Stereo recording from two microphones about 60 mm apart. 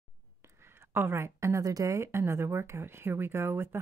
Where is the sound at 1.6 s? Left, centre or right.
Right.